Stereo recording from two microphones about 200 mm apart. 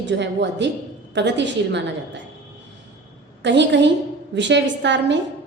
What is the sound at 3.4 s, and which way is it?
A woman's voice, 60° right (ahead or behind).